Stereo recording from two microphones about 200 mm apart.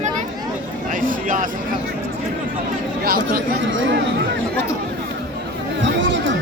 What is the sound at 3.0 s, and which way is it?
Speech, 45° right (ahead or behind).